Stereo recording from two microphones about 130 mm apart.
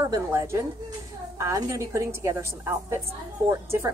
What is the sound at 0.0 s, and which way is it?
A woman's voice, 25° right (ahead or behind).